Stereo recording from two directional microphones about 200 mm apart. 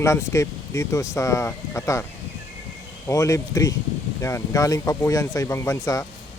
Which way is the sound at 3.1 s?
15° left (ahead or behind).